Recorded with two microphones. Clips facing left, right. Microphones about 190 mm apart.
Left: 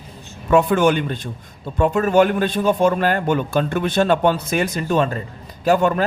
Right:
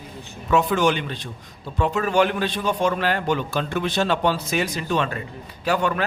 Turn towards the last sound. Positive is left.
turn(degrees=45)  # may be behind; listen again after turning